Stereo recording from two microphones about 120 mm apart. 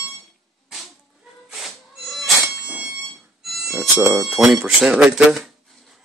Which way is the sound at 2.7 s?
5° right (ahead or behind).